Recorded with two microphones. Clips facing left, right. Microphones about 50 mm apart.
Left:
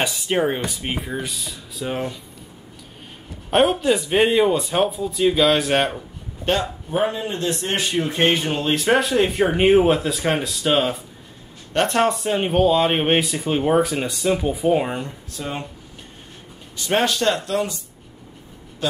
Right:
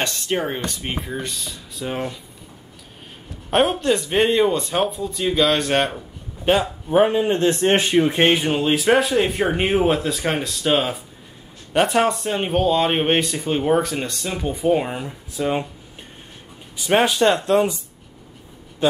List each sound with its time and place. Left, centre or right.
0.0 s speech: centre
3.4 s speech: centre
6.4 s speech: centre
7.2 s a man's voice: right
8.0 s speech: centre
16.7 s speech: centre